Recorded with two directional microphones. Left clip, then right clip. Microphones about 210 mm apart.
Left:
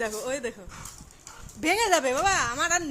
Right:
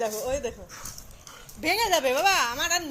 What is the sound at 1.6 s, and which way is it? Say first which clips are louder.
A woman's voice: even; 25° left (ahead or behind).